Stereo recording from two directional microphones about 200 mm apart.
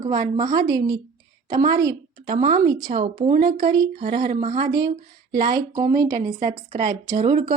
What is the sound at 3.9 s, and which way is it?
Speech, 45° right (ahead or behind).